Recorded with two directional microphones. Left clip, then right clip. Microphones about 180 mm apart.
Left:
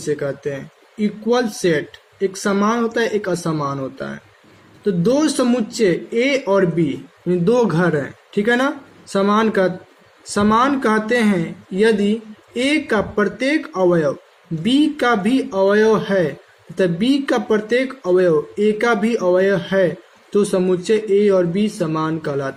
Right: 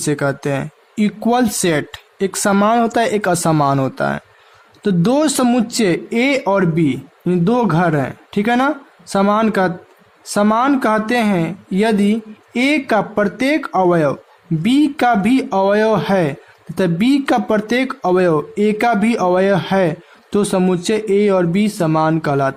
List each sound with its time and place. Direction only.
0.0 s speech: 50° right (ahead or behind)